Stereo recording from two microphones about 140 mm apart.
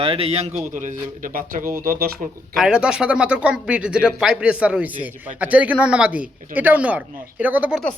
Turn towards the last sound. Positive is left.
turn(degrees=-10)  # may be behind; listen again after turning